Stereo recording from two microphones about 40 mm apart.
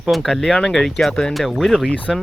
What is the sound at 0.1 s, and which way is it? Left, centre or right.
Speech, centre.